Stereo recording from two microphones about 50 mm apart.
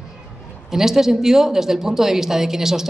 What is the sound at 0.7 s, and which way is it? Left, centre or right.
Speech, centre.